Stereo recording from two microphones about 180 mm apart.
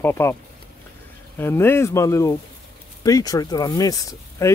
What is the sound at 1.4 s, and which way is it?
Speech, 15° left (ahead or behind).